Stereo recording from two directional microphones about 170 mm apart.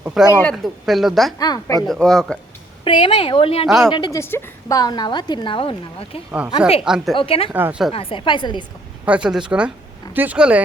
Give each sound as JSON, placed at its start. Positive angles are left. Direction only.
{"t": 0.0, "sound": "speech", "side_deg": -5}
{"t": 0.3, "sound": "speech", "side_deg": 10}
{"t": 0.5, "sound": "speech", "side_deg": 0}
{"t": 1.4, "sound": "a woman's voice", "side_deg": 20}
{"t": 1.9, "sound": "speech", "side_deg": 5}
{"t": 2.8, "sound": "a woman's voice", "side_deg": 30}
{"t": 4.2, "sound": "a woman's voice", "side_deg": 15}
{"t": 6.8, "sound": "speech", "side_deg": 0}
{"t": 7.2, "sound": "speech", "side_deg": 35}
{"t": 7.5, "sound": "a woman's voice", "side_deg": -10}
{"t": 7.9, "sound": "a woman's voice", "side_deg": 30}
{"t": 9.0, "sound": "speech", "side_deg": -5}